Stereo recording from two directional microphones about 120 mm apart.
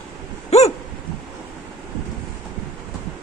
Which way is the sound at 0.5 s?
65° left (ahead or behind).